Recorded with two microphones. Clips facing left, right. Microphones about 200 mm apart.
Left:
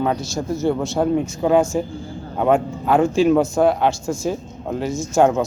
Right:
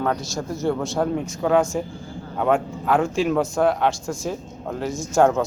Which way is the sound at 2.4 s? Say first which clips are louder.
Left 3 dB; centre (ahead or behind).